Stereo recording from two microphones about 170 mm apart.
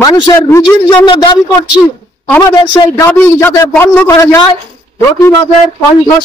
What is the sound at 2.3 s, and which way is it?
A man's voice, 15° left (ahead or behind).